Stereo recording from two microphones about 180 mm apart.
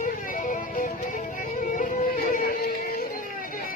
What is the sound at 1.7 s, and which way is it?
Music, 50° left (ahead or behind).